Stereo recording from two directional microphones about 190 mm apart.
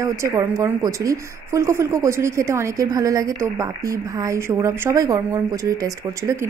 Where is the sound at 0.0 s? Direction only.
15° right (ahead or behind).